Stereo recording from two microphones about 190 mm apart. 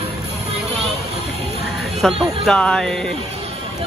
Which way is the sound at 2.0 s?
Centre (ahead or behind).